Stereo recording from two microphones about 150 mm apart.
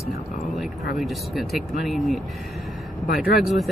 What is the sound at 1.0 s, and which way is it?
Speech, centre (ahead or behind).